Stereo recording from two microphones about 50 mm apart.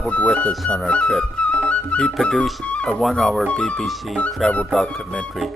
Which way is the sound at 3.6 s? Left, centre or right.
Centre.